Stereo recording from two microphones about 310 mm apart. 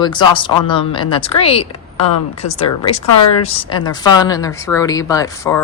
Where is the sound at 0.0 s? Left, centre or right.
Centre.